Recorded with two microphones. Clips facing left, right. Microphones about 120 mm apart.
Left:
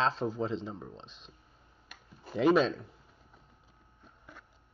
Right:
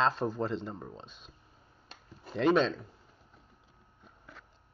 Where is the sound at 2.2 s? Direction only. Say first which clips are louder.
Left 1 dB; 5° left (ahead or behind).